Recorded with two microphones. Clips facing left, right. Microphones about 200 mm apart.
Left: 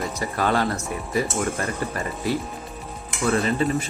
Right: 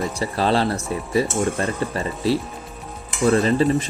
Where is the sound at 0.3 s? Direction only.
30° right (ahead or behind).